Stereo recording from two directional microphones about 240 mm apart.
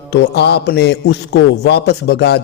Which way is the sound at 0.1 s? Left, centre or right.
Left.